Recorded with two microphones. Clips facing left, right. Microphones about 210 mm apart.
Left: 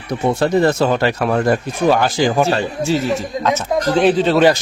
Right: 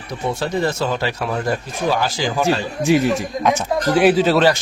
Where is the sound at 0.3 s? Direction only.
60° left (ahead or behind).